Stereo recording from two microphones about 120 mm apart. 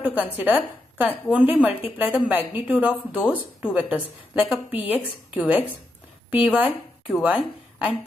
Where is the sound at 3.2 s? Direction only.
15° left (ahead or behind).